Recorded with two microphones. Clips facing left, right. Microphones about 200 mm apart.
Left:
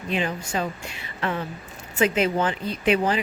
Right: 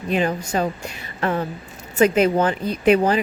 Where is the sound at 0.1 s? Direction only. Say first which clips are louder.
Right 5 dB; 45° right (ahead or behind).